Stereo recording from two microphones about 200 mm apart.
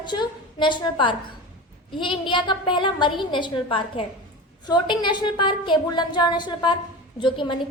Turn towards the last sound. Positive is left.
turn(degrees=25)  # may be behind; listen again after turning